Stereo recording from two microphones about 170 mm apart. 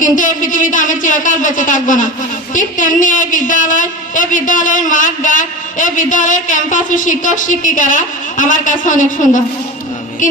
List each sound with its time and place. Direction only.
0.0 s a woman's voice: 50° left (ahead or behind)